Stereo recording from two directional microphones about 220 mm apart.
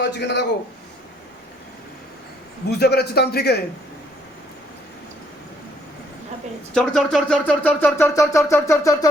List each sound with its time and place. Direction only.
0.0 s a man's voice: 50° left (ahead or behind)
2.6 s a man's voice: 45° left (ahead or behind)
6.7 s a sound: centre (ahead or behind)